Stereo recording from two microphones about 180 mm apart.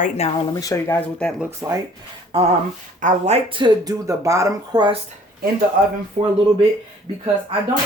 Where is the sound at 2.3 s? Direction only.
35° right (ahead or behind).